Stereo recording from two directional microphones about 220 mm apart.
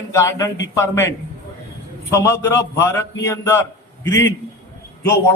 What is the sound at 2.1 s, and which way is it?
A man's voice, 15° left (ahead or behind).